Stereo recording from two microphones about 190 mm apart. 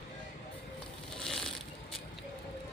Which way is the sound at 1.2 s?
5° left (ahead or behind).